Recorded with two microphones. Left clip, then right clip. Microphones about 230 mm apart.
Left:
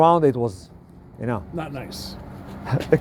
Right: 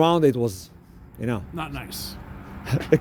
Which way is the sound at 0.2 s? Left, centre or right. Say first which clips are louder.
Left 1 dB; right.